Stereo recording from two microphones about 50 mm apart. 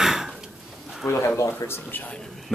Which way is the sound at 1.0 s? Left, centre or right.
Left.